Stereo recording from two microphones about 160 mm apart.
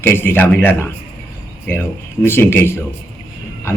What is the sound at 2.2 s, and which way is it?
Speech, 15° left (ahead or behind).